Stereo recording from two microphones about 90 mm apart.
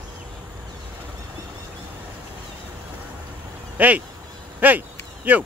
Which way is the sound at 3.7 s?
20° right (ahead or behind).